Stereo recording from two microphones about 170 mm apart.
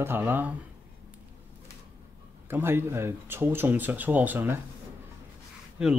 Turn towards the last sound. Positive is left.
turn(degrees=-5)  # may be behind; listen again after turning